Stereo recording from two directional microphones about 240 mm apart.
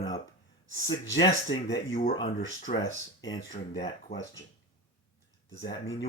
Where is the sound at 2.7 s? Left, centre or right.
Left.